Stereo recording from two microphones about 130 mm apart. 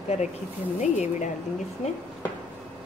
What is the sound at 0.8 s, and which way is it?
Speech, 65° left (ahead or behind).